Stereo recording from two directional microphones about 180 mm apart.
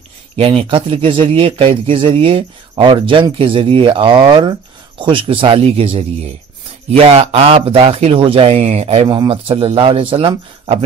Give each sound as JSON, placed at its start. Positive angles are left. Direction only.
{"t": 0.4, "sound": "speech", "side_deg": -30}